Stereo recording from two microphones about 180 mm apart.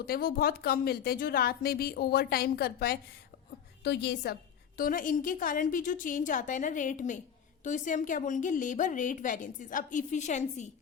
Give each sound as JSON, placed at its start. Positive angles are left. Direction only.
{"t": 0.1, "sound": "speech", "side_deg": 55}
{"t": 4.8, "sound": "a woman's voice", "side_deg": 50}